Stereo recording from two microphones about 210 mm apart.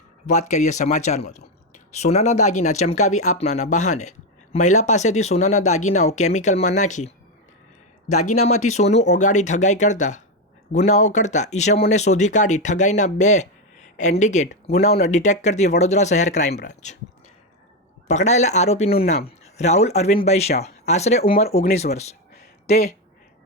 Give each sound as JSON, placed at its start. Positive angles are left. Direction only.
{"t": 0.3, "sound": "speech", "side_deg": 35}
{"t": 8.3, "sound": "speech", "side_deg": 30}
{"t": 18.1, "sound": "speech", "side_deg": 35}